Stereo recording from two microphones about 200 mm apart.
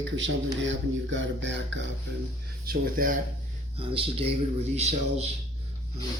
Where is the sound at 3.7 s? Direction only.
30° right (ahead or behind).